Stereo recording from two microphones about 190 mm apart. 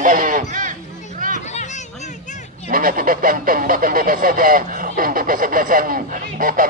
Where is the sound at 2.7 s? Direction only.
45° right (ahead or behind).